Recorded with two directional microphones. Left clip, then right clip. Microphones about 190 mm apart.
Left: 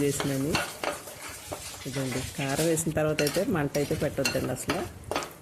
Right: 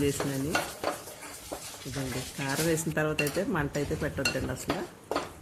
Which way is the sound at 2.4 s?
10° left (ahead or behind).